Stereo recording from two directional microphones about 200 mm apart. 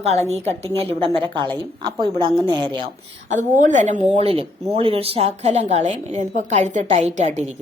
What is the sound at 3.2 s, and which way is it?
A woman's voice, 35° right (ahead or behind).